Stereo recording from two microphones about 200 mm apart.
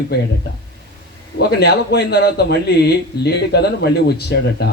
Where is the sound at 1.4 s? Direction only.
55° left (ahead or behind).